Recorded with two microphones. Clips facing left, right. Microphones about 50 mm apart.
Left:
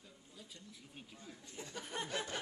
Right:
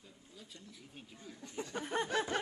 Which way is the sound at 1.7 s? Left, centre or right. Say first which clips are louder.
Right 6 dB; right.